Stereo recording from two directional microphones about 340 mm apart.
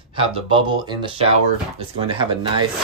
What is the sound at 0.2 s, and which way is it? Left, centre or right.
Speech, centre.